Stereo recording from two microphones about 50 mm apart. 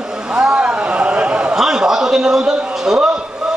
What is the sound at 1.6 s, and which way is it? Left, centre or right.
A man's voice, centre.